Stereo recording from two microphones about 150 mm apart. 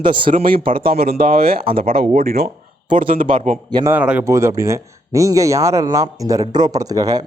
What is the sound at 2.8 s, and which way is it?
Speech, 35° right (ahead or behind).